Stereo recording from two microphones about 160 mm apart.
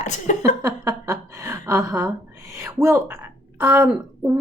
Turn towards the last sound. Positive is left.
turn(degrees=-15)  # may be behind; listen again after turning